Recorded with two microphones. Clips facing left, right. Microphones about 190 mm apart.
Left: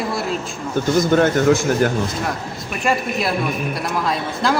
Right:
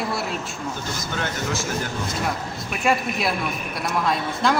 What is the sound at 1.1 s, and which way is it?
Speech, 55° left (ahead or behind).